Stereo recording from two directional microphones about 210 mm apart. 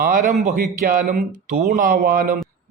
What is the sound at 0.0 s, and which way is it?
A man's voice, 40° right (ahead or behind).